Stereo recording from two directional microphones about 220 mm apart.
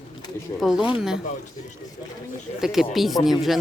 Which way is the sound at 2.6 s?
Centre (ahead or behind).